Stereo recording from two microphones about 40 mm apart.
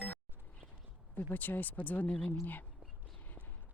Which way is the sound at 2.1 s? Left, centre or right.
Left.